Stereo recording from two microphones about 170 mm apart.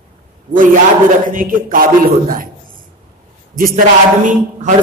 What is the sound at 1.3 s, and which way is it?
A man's voice, 55° right (ahead or behind).